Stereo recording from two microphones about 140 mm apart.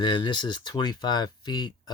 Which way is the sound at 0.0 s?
35° left (ahead or behind).